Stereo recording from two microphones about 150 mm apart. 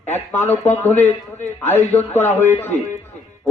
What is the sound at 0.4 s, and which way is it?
Speech, 15° left (ahead or behind).